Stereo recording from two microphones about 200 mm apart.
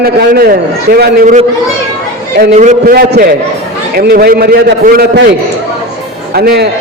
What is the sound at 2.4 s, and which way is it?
A man's voice, 45° right (ahead or behind).